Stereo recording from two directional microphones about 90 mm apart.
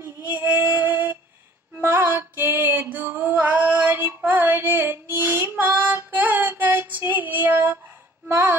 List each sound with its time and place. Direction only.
0.0 s female singing: 20° right (ahead or behind)
5.8 s child singing: 25° right (ahead or behind)
8.3 s music: 25° right (ahead or behind)